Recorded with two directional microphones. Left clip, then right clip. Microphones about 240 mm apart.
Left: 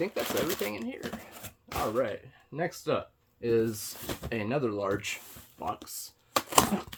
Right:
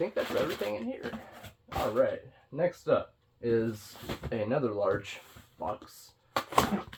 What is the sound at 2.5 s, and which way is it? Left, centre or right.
Speech, left.